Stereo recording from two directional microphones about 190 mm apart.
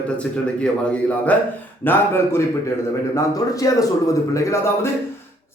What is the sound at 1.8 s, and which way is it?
A man's voice, 10° left (ahead or behind).